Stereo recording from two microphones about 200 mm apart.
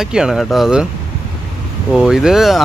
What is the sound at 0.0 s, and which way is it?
Speech, 5° right (ahead or behind).